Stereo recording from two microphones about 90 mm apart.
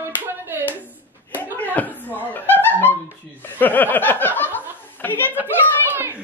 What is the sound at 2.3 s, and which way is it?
Music, 25° left (ahead or behind).